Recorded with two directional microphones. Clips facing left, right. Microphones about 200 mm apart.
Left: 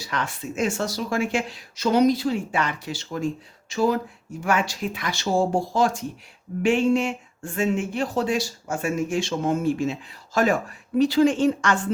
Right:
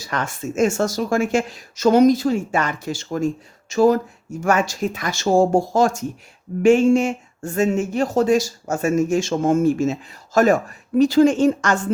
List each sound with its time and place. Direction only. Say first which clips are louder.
0.0 s speech: right 4 dB; 45° right (ahead or behind)